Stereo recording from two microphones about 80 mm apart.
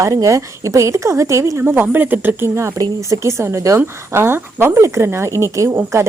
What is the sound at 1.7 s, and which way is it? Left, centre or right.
Speech, right.